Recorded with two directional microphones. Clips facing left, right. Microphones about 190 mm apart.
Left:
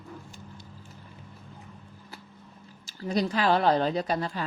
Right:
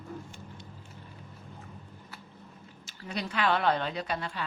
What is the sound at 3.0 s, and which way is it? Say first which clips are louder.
A woman's voice: left 5 dB; 35° left (ahead or behind).